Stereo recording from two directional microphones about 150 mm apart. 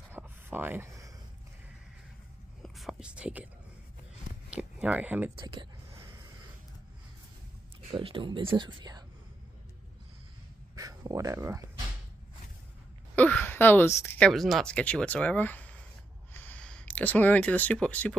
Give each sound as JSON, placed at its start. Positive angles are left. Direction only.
{"t": 0.1, "sound": "a sound", "side_deg": -15}
{"t": 2.6, "sound": "speech", "side_deg": 0}
{"t": 4.5, "sound": "a sound", "side_deg": -5}
{"t": 5.3, "sound": "speech", "side_deg": -35}
{"t": 7.9, "sound": "speech", "side_deg": -35}
{"t": 10.8, "sound": "speech", "side_deg": -25}
{"t": 13.1, "sound": "a woman's voice", "side_deg": 10}
{"t": 14.3, "sound": "speech", "side_deg": 0}